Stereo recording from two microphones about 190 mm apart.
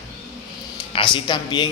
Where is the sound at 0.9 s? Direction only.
25° left (ahead or behind).